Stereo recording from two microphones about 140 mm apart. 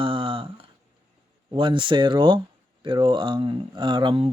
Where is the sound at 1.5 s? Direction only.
35° right (ahead or behind).